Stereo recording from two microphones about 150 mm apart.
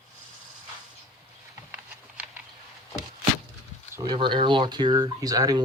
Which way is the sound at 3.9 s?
30° right (ahead or behind).